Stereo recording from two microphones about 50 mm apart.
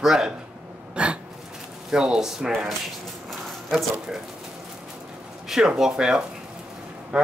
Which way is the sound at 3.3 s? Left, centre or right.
Centre.